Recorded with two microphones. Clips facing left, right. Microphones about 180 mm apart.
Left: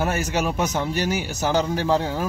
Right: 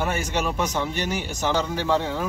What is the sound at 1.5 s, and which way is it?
Speech, 35° left (ahead or behind).